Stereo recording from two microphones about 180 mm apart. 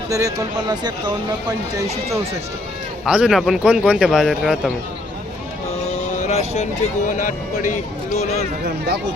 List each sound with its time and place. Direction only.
0.1 s speech: 20° right (ahead or behind)
3.0 s speech: 5° right (ahead or behind)
6.1 s a sound: 40° left (ahead or behind)
7.1 s speech: 50° left (ahead or behind)